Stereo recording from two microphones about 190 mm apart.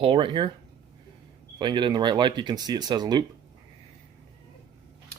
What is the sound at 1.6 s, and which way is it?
Speech, 25° right (ahead or behind).